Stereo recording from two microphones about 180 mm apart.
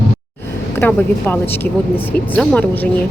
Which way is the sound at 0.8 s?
10° left (ahead or behind).